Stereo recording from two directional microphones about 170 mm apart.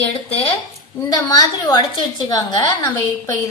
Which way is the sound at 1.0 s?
20° left (ahead or behind).